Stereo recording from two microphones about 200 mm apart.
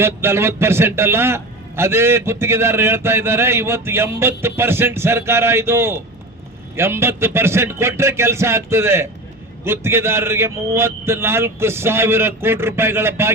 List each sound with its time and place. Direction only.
0.0 s a man's voice: 10° right (ahead or behind)